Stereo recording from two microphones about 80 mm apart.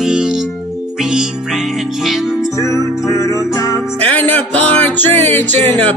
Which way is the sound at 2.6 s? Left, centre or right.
Left.